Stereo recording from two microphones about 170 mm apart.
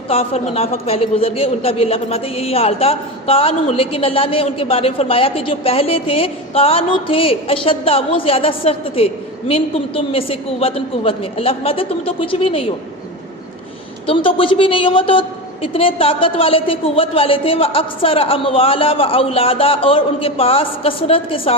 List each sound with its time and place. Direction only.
0.1 s a man's voice: 35° left (ahead or behind)
14.1 s a man's voice: 30° left (ahead or behind)